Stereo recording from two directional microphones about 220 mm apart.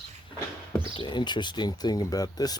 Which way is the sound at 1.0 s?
20° left (ahead or behind).